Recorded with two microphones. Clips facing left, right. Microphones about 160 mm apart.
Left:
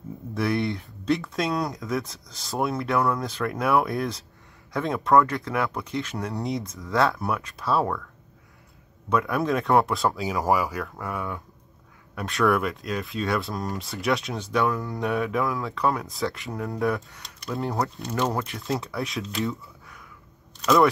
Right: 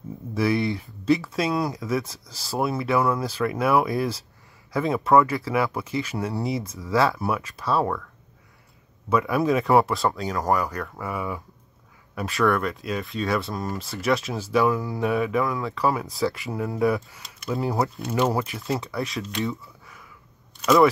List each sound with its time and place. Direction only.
0.3 s speech: centre (ahead or behind)
9.1 s speech: 5° right (ahead or behind)